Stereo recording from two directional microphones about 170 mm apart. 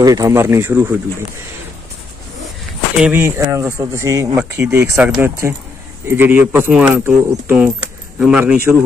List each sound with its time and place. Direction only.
0.0 s speech: 20° right (ahead or behind)
3.0 s speech: 10° right (ahead or behind)